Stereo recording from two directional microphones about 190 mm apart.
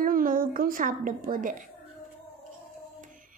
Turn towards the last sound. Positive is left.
turn(degrees=-45)  # may be behind; listen again after turning